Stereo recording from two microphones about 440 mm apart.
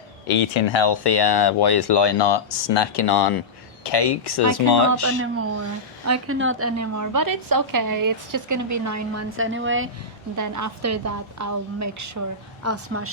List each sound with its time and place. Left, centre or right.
0.3 s speech: left
5.0 s a woman's voice: right
10.3 s a woman's voice: right